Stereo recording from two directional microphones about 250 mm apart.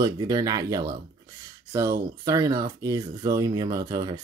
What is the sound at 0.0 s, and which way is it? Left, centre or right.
Speech, centre.